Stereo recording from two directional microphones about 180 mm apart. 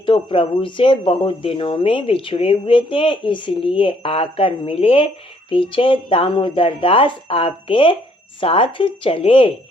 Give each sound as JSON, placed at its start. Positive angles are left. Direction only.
{"t": 0.0, "sound": "speech", "side_deg": 30}